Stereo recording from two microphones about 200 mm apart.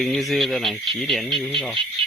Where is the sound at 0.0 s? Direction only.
Centre (ahead or behind).